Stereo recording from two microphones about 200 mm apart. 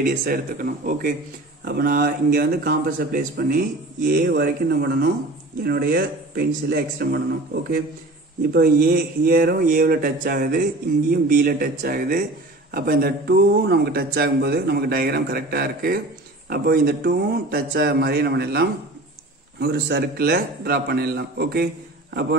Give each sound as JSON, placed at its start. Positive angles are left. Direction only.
{"t": 0.0, "sound": "speech", "side_deg": -45}
{"t": 8.5, "sound": "speech", "side_deg": -50}